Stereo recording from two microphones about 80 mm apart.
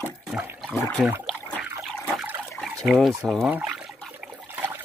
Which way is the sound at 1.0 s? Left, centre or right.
Centre.